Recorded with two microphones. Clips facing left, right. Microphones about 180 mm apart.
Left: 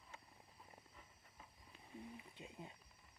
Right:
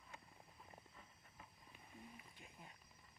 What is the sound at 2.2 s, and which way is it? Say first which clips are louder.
Speech: left 7 dB; 20° left (ahead or behind).